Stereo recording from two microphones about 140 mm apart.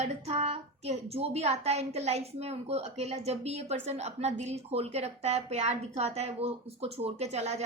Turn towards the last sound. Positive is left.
turn(degrees=-50)  # may be behind; listen again after turning